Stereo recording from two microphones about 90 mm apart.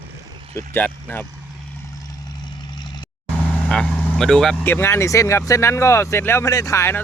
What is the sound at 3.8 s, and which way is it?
Speech, 5° left (ahead or behind).